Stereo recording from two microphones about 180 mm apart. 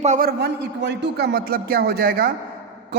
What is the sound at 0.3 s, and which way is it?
A man's voice, 70° right (ahead or behind).